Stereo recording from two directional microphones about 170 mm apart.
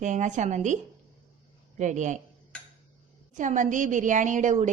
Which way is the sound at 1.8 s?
45° right (ahead or behind).